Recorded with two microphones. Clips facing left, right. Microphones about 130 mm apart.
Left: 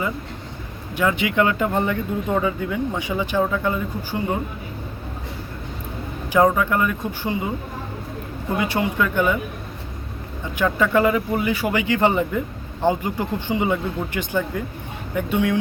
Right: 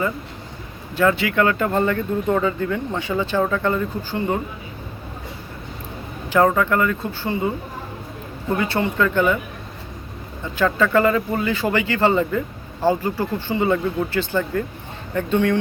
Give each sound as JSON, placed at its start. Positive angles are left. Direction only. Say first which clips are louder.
{"t": 0.9, "sound": "speech", "louder": "right 2 dB", "side_deg": 15}
{"t": 6.3, "sound": "speech", "louder": "right 1 dB", "side_deg": 15}
{"t": 8.5, "sound": "speech", "louder": "right 1 dB", "side_deg": 15}
{"t": 10.6, "sound": "speech", "louder": "right 1 dB", "side_deg": 15}